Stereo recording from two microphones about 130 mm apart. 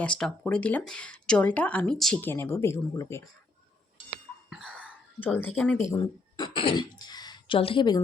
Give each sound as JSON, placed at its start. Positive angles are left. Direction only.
{"t": 0.0, "sound": "speech", "side_deg": 5}
{"t": 2.2, "sound": "speech", "side_deg": 15}
{"t": 4.6, "sound": "whispering", "side_deg": 10}
{"t": 5.2, "sound": "speech", "side_deg": 15}
{"t": 5.9, "sound": "speech", "side_deg": 30}
{"t": 6.5, "sound": "speech", "side_deg": 40}